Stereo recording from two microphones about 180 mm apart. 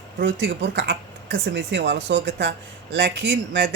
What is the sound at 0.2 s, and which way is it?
Speech, 85° right.